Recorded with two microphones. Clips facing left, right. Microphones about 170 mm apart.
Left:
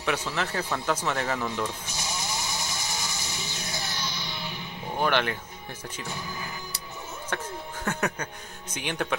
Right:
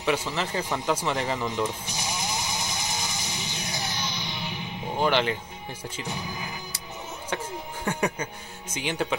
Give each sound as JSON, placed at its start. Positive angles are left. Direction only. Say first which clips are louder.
{"t": 0.0, "sound": "music", "louder": "right 2 dB", "side_deg": -10}
{"t": 5.9, "sound": "speech", "louder": "right 2 dB", "side_deg": -15}